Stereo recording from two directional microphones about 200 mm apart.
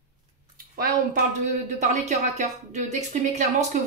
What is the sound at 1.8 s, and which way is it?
Speech, 35° right (ahead or behind).